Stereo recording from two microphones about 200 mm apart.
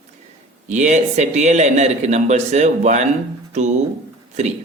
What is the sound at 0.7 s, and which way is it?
A man's voice, 35° right (ahead or behind).